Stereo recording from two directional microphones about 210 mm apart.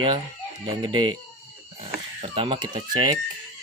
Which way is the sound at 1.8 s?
25° right (ahead or behind).